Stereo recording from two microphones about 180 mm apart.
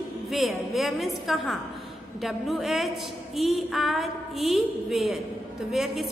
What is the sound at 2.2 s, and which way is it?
A woman's voice, centre (ahead or behind).